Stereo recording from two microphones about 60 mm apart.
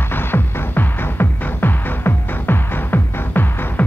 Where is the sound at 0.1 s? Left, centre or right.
Left.